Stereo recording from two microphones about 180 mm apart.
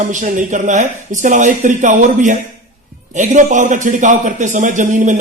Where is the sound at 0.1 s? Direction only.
45° right (ahead or behind).